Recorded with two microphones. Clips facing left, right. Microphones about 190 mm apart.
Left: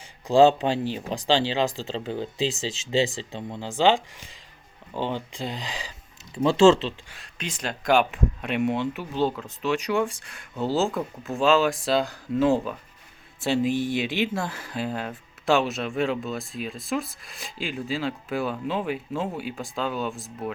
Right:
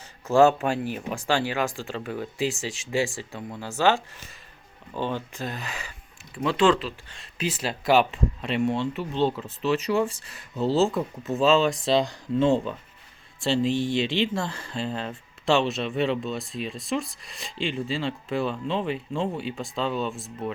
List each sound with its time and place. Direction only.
0.3 s speech: 15° left (ahead or behind)
6.3 s speech: 25° left (ahead or behind)
7.3 s speech: 5° right (ahead or behind)
13.7 s speech: 25° right (ahead or behind)
13.9 s speech: 5° left (ahead or behind)